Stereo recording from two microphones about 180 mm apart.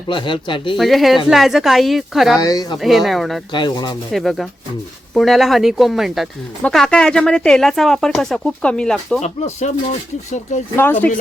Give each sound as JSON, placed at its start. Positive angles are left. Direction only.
{"t": 0.1, "sound": "speech", "side_deg": 25}
{"t": 0.8, "sound": "speech", "side_deg": 0}
{"t": 2.4, "sound": "speech", "side_deg": 20}
{"t": 2.7, "sound": "speech", "side_deg": 0}
{"t": 3.5, "sound": "speech", "side_deg": 25}
{"t": 4.1, "sound": "speech", "side_deg": 0}
{"t": 9.2, "sound": "speech", "side_deg": 40}
{"t": 10.8, "sound": "speech", "side_deg": 10}